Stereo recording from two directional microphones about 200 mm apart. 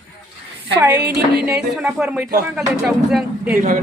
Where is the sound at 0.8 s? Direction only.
10° right (ahead or behind).